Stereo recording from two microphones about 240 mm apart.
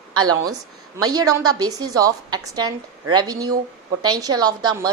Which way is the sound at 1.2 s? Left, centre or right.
Right.